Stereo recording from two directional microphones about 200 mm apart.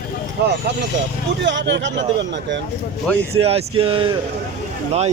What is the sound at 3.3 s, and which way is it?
Speech, 30° right (ahead or behind).